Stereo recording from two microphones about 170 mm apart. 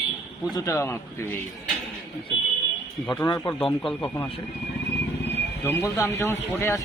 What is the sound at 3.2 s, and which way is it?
Speech, 20° left (ahead or behind).